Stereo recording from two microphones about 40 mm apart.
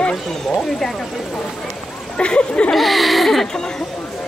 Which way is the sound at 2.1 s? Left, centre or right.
Left.